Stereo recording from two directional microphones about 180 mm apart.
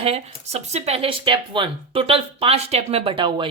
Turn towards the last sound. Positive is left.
turn(degrees=-30)  # may be behind; listen again after turning